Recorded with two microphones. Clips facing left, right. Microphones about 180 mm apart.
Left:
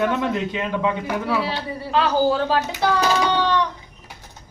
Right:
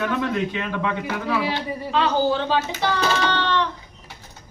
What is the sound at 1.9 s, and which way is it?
Speech, 5° left (ahead or behind).